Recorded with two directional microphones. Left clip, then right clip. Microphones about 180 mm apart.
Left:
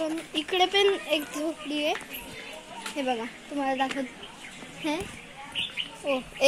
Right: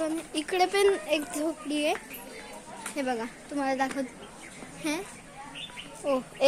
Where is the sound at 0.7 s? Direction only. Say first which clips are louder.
Left 1 dB; centre (ahead or behind).